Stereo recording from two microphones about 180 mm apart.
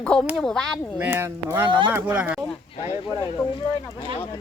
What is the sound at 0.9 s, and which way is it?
Speech, 10° right (ahead or behind).